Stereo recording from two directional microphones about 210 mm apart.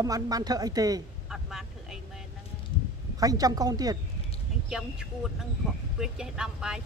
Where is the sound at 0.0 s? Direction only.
15° right (ahead or behind).